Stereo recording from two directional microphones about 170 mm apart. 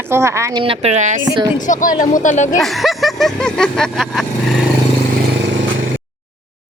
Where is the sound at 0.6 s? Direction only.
35° right (ahead or behind).